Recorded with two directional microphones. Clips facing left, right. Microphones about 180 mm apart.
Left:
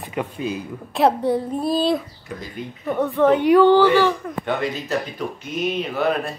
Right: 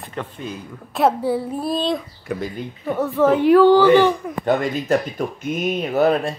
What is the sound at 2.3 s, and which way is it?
Speech, 65° right (ahead or behind).